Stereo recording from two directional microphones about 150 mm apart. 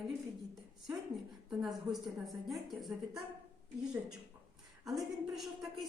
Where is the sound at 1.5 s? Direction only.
Centre (ahead or behind).